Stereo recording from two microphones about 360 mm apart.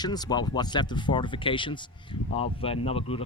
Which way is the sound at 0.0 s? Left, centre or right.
Centre.